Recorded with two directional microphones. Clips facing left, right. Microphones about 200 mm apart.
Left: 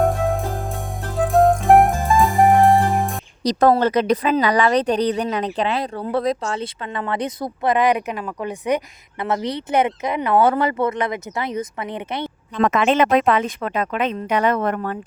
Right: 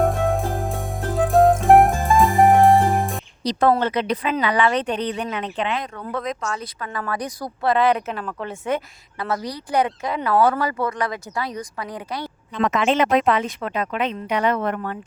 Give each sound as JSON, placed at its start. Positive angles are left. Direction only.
{"t": 0.0, "sound": "music", "side_deg": 0}
{"t": 3.4, "sound": "a woman's voice", "side_deg": 40}
{"t": 12.5, "sound": "speech", "side_deg": 50}